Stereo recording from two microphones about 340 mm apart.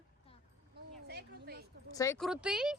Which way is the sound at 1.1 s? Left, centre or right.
Right.